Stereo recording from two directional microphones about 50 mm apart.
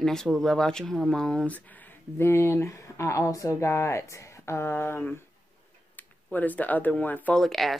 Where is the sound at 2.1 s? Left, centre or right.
Left.